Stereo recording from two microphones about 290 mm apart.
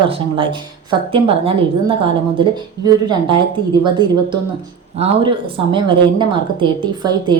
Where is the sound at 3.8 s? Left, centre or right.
Centre.